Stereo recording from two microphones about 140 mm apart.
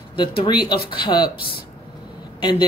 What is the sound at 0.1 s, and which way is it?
Speech, 40° left (ahead or behind).